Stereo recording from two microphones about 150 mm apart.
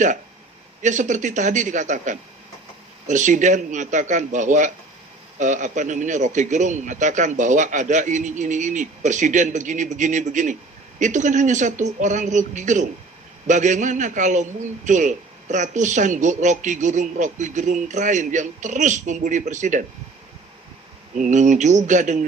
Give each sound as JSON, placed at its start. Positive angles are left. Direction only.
{"t": 0.8, "sound": "a man's voice", "side_deg": -55}
{"t": 21.2, "sound": "a man's voice", "side_deg": -55}